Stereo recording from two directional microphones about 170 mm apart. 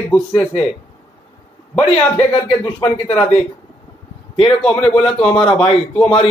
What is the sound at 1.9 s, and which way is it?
Speech, 35° left (ahead or behind).